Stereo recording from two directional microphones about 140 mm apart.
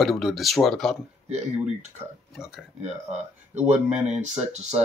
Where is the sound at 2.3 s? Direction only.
5° right (ahead or behind).